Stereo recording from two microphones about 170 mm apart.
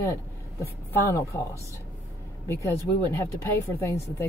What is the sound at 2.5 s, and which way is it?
Speech, 15° left (ahead or behind).